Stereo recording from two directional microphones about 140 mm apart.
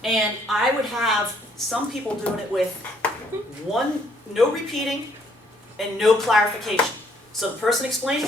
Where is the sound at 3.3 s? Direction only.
15° right (ahead or behind).